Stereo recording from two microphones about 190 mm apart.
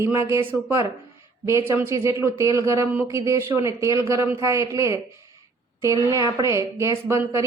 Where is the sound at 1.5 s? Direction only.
15° right (ahead or behind).